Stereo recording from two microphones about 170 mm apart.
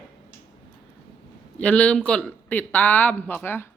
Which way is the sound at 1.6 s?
5° left (ahead or behind).